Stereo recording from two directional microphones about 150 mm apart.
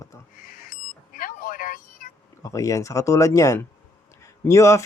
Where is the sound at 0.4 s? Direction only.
70° left (ahead or behind).